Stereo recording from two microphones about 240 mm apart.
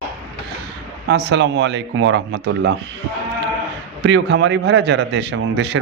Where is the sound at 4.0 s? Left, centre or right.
Right.